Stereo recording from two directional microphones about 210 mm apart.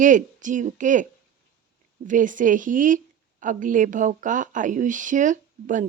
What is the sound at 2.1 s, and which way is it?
A woman's voice, 40° right (ahead or behind).